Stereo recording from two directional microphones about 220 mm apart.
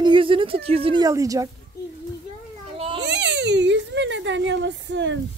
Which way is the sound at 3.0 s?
50° right (ahead or behind).